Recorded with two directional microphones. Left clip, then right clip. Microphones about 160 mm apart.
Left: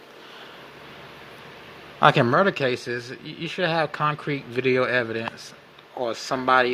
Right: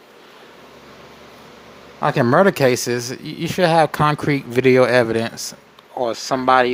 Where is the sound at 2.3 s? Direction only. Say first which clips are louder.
Right 6 dB; 40° right (ahead or behind).